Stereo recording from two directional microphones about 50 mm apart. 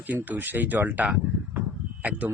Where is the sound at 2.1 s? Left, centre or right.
Right.